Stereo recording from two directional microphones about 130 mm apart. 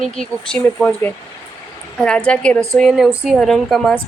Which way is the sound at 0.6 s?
15° left (ahead or behind).